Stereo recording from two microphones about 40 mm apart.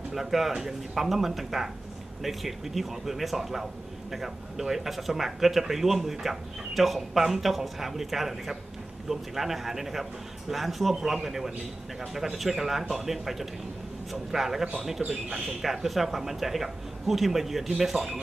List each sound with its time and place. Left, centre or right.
0.1 s speech: centre
15.6 s speech: centre